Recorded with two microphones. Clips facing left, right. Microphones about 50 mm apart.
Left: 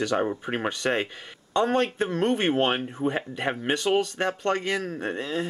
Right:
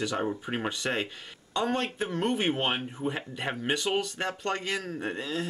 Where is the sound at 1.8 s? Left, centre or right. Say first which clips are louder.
Left 6 dB; centre.